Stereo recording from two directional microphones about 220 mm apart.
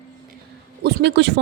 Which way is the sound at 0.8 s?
50° right (ahead or behind).